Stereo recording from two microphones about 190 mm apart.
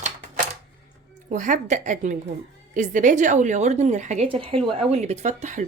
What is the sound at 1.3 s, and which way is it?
A woman's voice, 40° right (ahead or behind).